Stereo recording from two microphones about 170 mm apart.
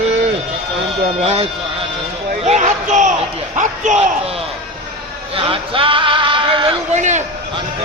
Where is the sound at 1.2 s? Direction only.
35° right (ahead or behind).